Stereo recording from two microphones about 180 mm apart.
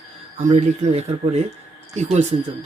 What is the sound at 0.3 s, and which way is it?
Speech, 40° right (ahead or behind).